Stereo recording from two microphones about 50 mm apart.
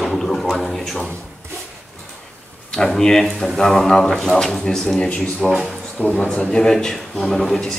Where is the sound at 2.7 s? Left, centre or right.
Centre.